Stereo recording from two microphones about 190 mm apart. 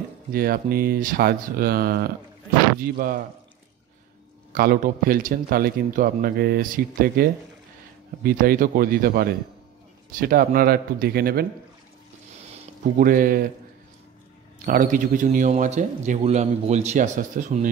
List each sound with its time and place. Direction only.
0.3 s a man's voice: 50° right (ahead or behind)
4.5 s a man's voice: 50° right (ahead or behind)
13.0 s a man's voice: 50° right (ahead or behind)
14.7 s a man's voice: 45° right (ahead or behind)